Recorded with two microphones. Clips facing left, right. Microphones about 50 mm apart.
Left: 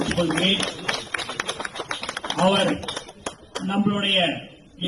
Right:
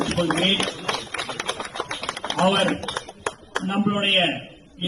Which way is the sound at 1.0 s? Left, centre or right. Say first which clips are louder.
Left 1 dB; right.